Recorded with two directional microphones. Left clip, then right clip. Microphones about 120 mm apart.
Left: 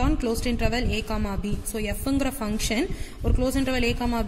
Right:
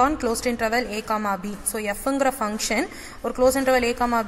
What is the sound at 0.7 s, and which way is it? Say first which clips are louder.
A woman's voice: right 5 dB; 15° left (ahead or behind).